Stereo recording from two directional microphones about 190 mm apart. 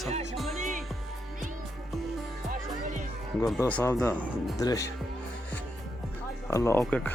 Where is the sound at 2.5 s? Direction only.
40° right (ahead or behind).